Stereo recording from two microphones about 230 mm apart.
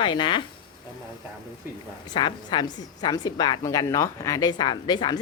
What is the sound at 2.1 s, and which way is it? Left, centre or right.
A woman's voice, centre.